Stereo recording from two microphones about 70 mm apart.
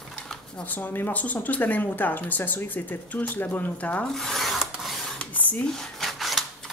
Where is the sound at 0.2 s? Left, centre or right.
Centre.